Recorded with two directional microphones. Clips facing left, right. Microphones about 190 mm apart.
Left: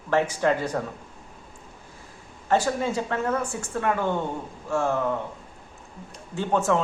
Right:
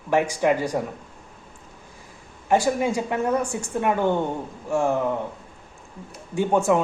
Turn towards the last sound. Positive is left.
turn(degrees=-10)  # may be behind; listen again after turning